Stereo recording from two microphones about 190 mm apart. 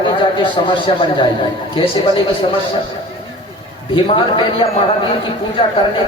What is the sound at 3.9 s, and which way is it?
Speech, 25° left (ahead or behind).